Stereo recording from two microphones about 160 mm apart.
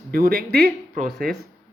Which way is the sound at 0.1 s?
70° right (ahead or behind).